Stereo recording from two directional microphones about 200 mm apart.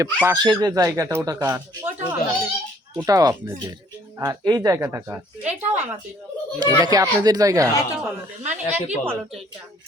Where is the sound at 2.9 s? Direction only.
20° right (ahead or behind).